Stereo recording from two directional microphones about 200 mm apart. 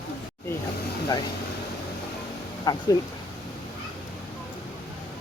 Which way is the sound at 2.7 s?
20° left (ahead or behind).